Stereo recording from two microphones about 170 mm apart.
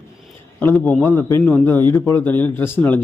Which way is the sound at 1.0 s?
15° left (ahead or behind).